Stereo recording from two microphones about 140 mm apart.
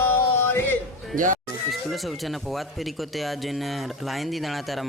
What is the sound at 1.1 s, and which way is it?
Speech, 70° right (ahead or behind).